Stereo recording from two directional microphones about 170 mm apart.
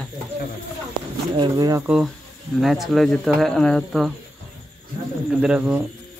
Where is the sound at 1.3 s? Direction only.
25° right (ahead or behind).